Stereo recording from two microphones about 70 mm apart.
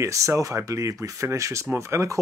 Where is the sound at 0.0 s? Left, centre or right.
Right.